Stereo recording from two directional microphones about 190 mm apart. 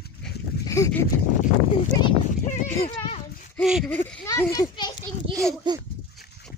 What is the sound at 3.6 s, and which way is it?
Speech, 5° right (ahead or behind).